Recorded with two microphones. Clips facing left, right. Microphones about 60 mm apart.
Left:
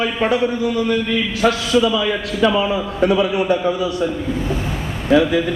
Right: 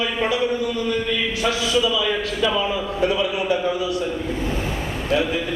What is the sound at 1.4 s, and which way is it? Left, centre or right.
A man's voice, left.